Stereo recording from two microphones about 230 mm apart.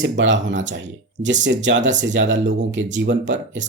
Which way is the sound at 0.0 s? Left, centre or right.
Right.